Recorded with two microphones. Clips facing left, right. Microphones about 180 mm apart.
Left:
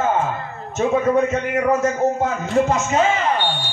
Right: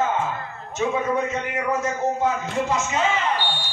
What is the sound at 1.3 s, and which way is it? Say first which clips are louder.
A man's voice: left 6 dB; 45° left (ahead or behind).